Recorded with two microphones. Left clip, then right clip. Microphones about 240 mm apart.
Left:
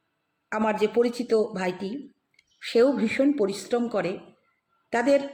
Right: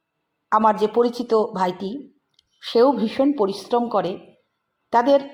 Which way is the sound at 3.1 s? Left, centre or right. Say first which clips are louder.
Right 3 dB; centre.